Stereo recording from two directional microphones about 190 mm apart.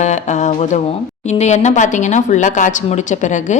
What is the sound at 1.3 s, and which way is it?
Speech, 35° left (ahead or behind).